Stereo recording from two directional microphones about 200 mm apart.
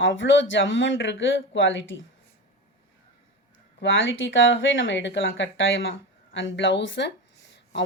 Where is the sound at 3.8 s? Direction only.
70° left (ahead or behind).